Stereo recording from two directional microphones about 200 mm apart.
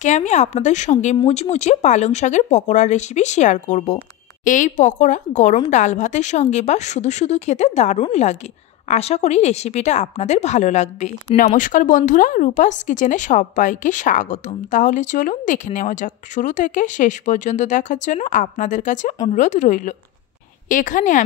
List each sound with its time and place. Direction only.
0.0 s a woman's voice: 35° left (ahead or behind)